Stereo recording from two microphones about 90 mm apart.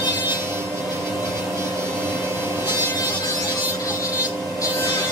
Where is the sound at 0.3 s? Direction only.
30° right (ahead or behind).